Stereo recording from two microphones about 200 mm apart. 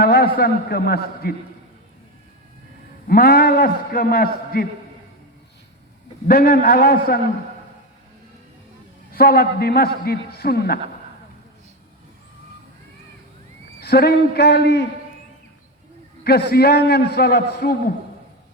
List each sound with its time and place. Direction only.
0.0 s a man's voice: 50° left (ahead or behind)
3.1 s a man's voice: 50° left (ahead or behind)
6.2 s a man's voice: 50° left (ahead or behind)
9.1 s a man's voice: 50° left (ahead or behind)
13.8 s a man's voice: 50° left (ahead or behind)
16.2 s a man's voice: 50° left (ahead or behind)